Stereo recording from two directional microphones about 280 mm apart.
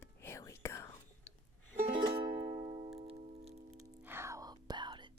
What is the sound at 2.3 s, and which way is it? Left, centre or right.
Music, right.